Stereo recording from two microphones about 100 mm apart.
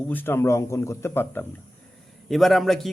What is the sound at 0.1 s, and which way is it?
Speech, 20° left (ahead or behind).